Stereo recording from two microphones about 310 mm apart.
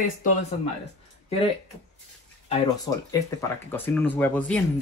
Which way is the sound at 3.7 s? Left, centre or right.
Centre.